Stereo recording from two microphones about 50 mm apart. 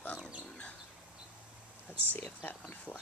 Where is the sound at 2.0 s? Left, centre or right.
Left.